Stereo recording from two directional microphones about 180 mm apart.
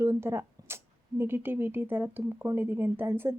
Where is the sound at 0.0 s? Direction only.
15° right (ahead or behind).